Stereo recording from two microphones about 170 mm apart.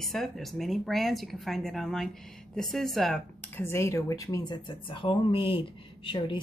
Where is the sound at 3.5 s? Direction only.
15° left (ahead or behind); by 6.4 s 30° left (ahead or behind).